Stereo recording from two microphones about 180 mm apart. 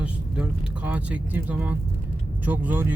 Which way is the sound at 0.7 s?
5° right (ahead or behind).